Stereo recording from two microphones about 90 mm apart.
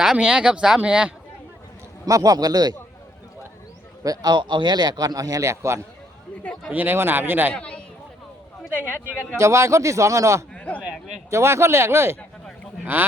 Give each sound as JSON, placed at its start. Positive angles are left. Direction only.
{"t": 0.0, "sound": "speech", "side_deg": -10}
{"t": 2.0, "sound": "speech", "side_deg": -40}
{"t": 4.0, "sound": "speech", "side_deg": -45}
{"t": 6.4, "sound": "a sound", "side_deg": 10}
{"t": 6.7, "sound": "speech", "side_deg": -20}
{"t": 7.5, "sound": "a sound", "side_deg": 10}
{"t": 9.4, "sound": "a man's voice", "side_deg": -35}
{"t": 10.5, "sound": "a sound", "side_deg": 15}
{"t": 11.3, "sound": "speech", "side_deg": -30}